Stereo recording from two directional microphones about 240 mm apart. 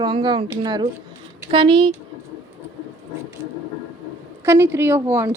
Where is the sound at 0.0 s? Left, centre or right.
Centre.